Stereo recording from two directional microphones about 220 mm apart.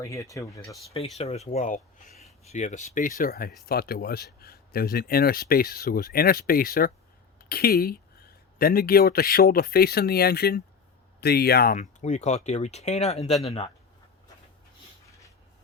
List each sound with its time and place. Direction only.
0.0 s speech: 15° left (ahead or behind)
1.2 s speech: 30° left (ahead or behind)
2.0 s a sound: centre (ahead or behind)
2.5 s speech: 35° left (ahead or behind)